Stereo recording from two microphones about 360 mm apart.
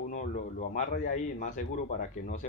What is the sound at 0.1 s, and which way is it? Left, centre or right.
A man's voice, left.